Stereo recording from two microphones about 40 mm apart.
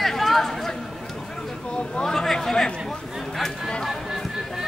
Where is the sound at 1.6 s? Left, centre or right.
Left.